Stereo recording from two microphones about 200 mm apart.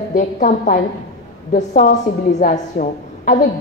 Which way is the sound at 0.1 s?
40° left (ahead or behind).